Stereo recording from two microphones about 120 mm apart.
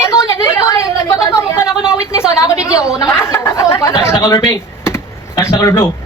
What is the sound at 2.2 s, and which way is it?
Speech, 25° left (ahead or behind).